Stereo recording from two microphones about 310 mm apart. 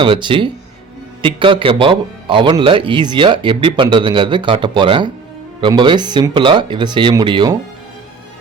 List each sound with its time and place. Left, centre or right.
0.0 s speech: centre